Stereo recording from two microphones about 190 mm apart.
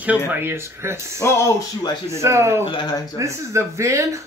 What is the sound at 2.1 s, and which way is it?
Speech, 15° right (ahead or behind).